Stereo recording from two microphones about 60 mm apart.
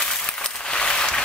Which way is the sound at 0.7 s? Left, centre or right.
Centre.